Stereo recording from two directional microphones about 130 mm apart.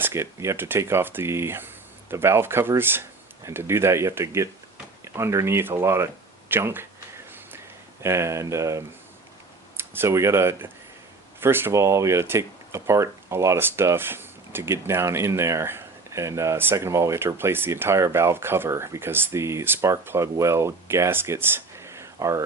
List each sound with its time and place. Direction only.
0.0 s speech: 20° right (ahead or behind)
8.0 s speech: 20° right (ahead or behind)